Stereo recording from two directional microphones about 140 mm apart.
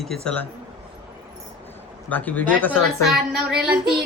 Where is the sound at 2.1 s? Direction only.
10° left (ahead or behind).